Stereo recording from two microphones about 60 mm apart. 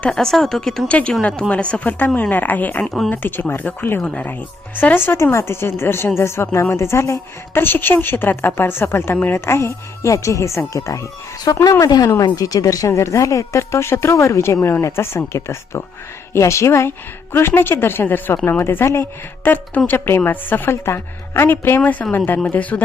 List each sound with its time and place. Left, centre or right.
0.1 s speech: centre
0.9 s speech: left
2.8 s speech: centre
3.1 s a woman's voice: left
4.0 s speech: centre
4.8 s a woman's voice: left
11.8 s speech: left
12.9 s a woman's voice: left
17.3 s a woman's voice: left
19.9 s a woman's voice: left
20.7 s a woman's voice: left